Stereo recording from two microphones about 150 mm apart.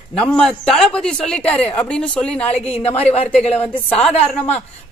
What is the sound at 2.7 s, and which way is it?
Speech, 40° left (ahead or behind).